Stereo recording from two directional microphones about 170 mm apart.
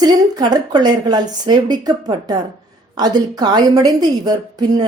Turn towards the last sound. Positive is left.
turn(degrees=-25)  # may be behind; listen again after turning